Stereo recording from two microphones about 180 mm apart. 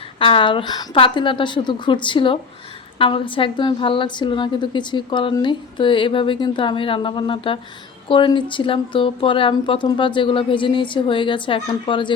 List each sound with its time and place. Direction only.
0.2 s a woman's voice: 30° left (ahead or behind)